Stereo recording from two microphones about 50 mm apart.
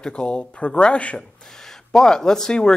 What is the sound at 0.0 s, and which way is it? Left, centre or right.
Speech, centre.